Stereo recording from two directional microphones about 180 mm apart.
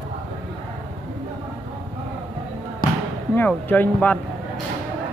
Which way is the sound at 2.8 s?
50° left (ahead or behind).